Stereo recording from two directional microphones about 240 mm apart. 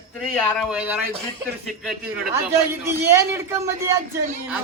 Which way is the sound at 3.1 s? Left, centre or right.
Centre.